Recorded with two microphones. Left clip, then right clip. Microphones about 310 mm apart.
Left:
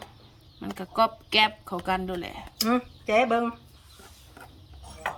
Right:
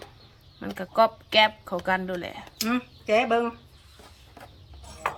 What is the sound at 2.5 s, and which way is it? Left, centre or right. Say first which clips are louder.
Speech: left 3 dB; centre.